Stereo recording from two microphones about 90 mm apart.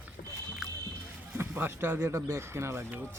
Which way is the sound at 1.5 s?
25° right (ahead or behind).